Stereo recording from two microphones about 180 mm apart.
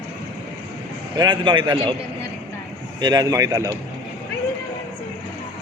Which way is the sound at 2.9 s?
20° right (ahead or behind).